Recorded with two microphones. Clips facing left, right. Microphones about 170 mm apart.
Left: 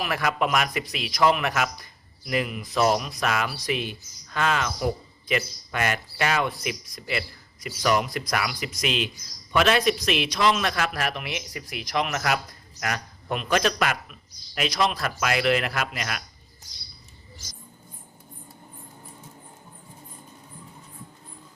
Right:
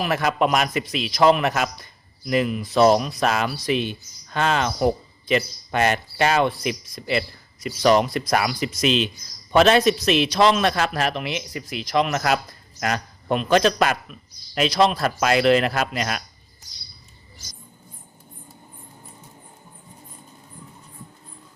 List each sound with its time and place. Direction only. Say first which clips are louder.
0.0 s a man's voice: right 4 dB; 25° right (ahead or behind)